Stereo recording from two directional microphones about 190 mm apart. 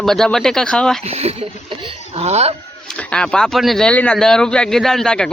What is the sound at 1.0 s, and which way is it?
Speech, 35° right (ahead or behind).